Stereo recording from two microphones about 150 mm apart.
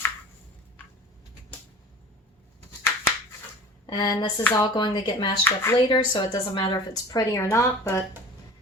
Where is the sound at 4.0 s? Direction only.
30° left (ahead or behind).